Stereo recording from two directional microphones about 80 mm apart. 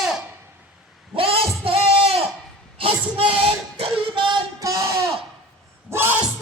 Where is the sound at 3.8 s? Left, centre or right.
Right.